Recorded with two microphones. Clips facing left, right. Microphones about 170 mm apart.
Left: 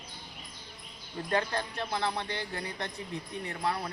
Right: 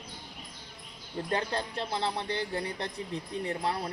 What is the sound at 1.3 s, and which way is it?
Speech, 25° right (ahead or behind).